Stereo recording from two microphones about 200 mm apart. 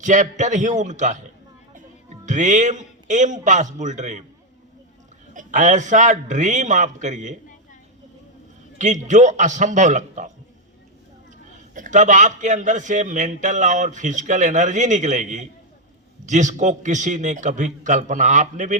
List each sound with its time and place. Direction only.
0.0 s a man's voice: 40° right (ahead or behind)
2.2 s a man's voice: 40° right (ahead or behind)
5.3 s a man's voice: 40° right (ahead or behind)
8.8 s a man's voice: 35° right (ahead or behind)
11.7 s a man's voice: 40° right (ahead or behind)